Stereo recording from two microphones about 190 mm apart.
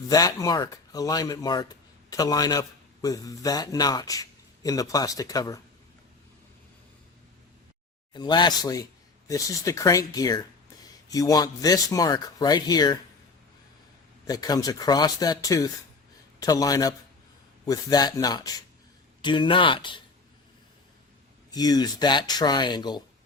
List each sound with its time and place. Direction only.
0.1 s speech: 20° left (ahead or behind)
8.1 s speech: 25° left (ahead or behind)
14.3 s speech: 20° left (ahead or behind)
21.5 s speech: 20° left (ahead or behind)